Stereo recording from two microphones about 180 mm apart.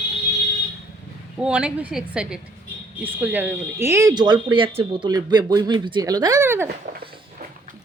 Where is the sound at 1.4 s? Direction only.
5° right (ahead or behind).